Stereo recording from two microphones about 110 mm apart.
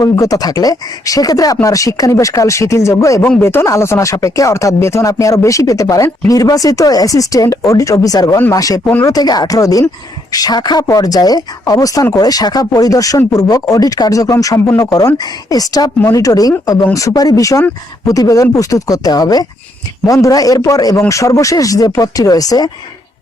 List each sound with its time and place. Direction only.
0.0 s speech: 35° left (ahead or behind)